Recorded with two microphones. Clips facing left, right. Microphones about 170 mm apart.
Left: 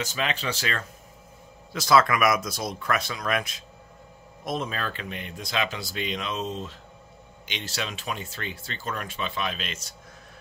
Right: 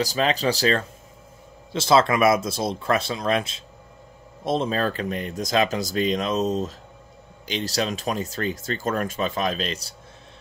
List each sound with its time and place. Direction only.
0.0 s speech: 35° right (ahead or behind)